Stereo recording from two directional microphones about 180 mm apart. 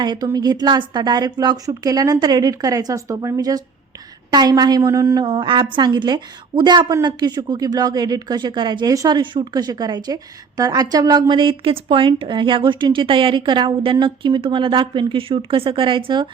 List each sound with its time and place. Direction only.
0.0 s a woman's voice: 25° right (ahead or behind)